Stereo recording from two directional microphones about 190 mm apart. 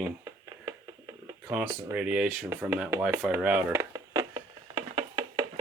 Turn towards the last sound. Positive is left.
turn(degrees=-30)  # may be behind; listen again after turning